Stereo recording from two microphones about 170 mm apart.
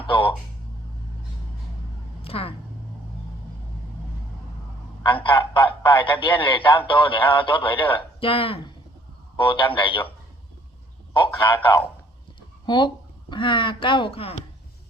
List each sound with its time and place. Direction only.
0.0 s speech: 30° left (ahead or behind)
2.2 s speech: 35° left (ahead or behind)
5.0 s speech: 30° left (ahead or behind)
11.4 s speech: 30° left (ahead or behind)